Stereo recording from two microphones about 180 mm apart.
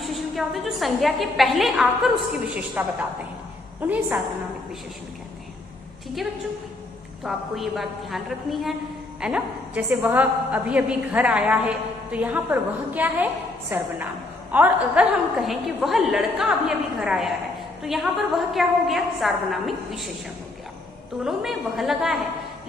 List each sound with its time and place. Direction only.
0.0 s a woman's voice: centre (ahead or behind)
7.3 s a woman's voice: centre (ahead or behind)
21.2 s a woman's voice: centre (ahead or behind)